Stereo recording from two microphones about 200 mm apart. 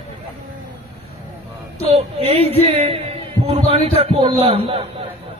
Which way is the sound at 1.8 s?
30° right (ahead or behind).